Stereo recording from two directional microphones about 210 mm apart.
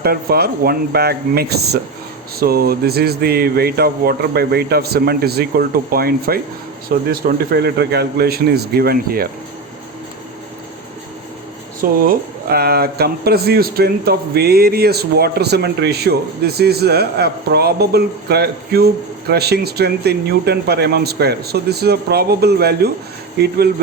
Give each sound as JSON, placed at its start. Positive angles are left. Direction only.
{"t": 0.0, "sound": "speech", "side_deg": -45}
{"t": 11.8, "sound": "speech", "side_deg": -45}